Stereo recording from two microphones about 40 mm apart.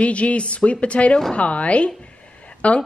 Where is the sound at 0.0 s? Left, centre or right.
Left.